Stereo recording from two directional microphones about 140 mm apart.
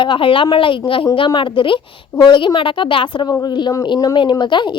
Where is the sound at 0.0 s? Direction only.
35° left (ahead or behind).